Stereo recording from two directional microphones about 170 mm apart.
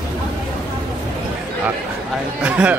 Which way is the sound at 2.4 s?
10° right (ahead or behind).